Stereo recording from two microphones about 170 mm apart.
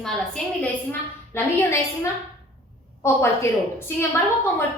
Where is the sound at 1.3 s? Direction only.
15° left (ahead or behind).